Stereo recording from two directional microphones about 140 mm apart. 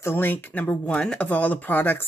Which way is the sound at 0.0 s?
15° left (ahead or behind).